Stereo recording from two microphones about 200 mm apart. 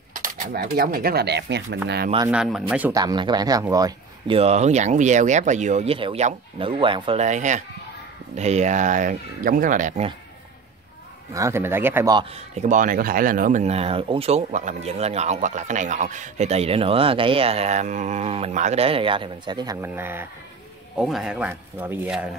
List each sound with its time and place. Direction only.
0.1 s speech: 40° right (ahead or behind); by 1.8 s 60° right (ahead or behind)
2.2 s speech: 5° right (ahead or behind)
2.9 s speech: 20° right (ahead or behind)
4.4 s speech: 35° right (ahead or behind)
11.3 s a man's voice: 15° right (ahead or behind)
12.5 s a man's voice: 40° right (ahead or behind); by 22.3 s 5° right (ahead or behind)